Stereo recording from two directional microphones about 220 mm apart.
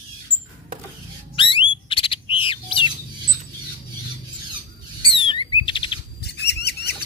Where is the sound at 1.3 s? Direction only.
25° left (ahead or behind).